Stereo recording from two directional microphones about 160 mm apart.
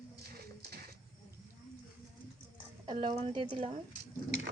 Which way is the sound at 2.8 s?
30° right (ahead or behind).